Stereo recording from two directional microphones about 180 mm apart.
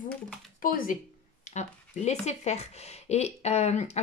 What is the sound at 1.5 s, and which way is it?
Speech, 40° left (ahead or behind).